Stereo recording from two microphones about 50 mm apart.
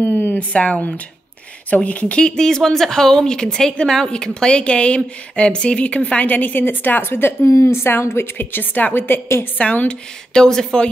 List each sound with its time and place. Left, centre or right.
0.0 s a sound: left
0.4 s speech: left
6.2 s a woman's voice: left
7.5 s speech: left
8.4 s a woman's voice: left
9.6 s speech: left
10.3 s speech: centre